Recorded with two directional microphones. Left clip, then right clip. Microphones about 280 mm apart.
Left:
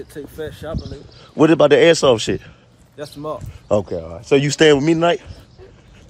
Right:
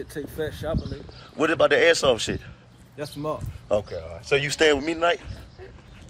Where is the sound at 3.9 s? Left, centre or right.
Left.